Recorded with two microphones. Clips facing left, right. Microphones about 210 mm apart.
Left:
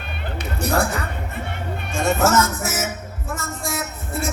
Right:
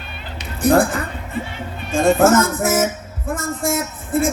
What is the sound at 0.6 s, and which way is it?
Speech, 50° right (ahead or behind).